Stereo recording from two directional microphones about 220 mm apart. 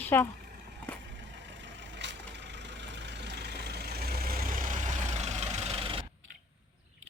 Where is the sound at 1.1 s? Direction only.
55° right (ahead or behind); by 6.1 s 25° right (ahead or behind).